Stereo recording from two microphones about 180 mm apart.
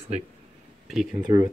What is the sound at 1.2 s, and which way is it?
Speech, 20° right (ahead or behind).